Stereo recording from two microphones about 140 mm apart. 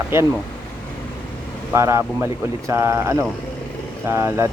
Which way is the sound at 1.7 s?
20° right (ahead or behind).